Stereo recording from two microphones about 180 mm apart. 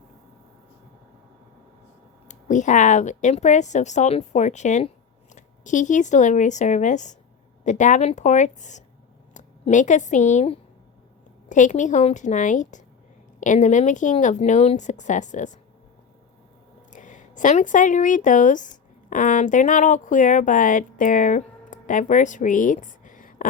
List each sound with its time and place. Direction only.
2.2 s a woman's voice: 45° left (ahead or behind)
16.9 s speech: 45° left (ahead or behind)